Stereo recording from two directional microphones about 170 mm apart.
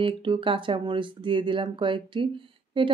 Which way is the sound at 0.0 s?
30° right (ahead or behind).